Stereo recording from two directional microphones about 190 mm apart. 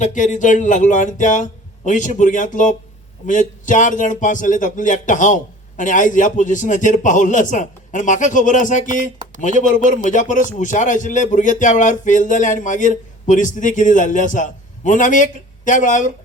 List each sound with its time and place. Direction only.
0.0 s speech: 40° left (ahead or behind)